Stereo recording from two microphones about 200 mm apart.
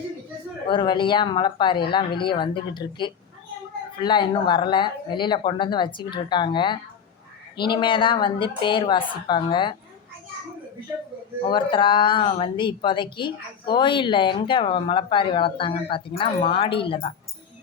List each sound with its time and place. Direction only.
0.7 s speech: 25° left (ahead or behind)
11.4 s speech: 25° left (ahead or behind)